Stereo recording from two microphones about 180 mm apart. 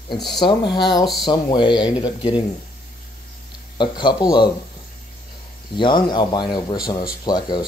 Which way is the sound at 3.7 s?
25° left (ahead or behind).